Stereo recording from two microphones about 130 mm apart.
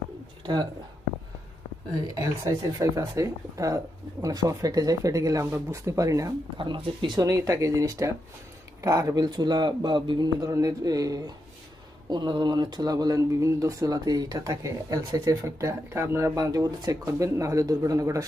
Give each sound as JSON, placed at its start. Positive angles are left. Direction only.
{"t": 2.1, "sound": "a man's voice", "side_deg": -30}